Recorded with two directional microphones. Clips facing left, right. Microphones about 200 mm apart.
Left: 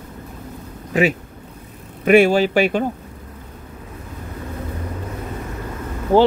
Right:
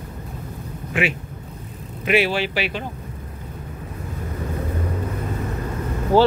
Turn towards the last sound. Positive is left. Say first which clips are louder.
# left 2 dB
turn(degrees=20)  # may be behind; listen again after turning